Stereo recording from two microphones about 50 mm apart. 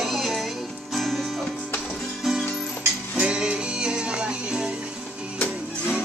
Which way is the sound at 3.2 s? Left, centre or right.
Centre.